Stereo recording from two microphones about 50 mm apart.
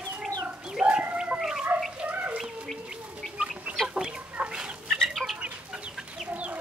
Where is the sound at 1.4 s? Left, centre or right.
Centre.